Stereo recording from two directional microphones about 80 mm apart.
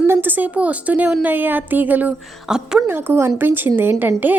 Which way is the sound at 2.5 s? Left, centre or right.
Centre.